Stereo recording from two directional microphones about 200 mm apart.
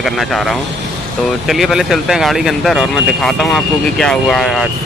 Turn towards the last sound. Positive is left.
turn(degrees=0)  # may be behind; listen again after turning